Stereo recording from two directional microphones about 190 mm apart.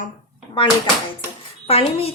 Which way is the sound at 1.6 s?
30° left (ahead or behind).